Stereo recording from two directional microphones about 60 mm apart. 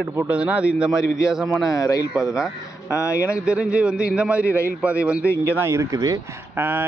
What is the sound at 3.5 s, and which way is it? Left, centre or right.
A man's voice, centre.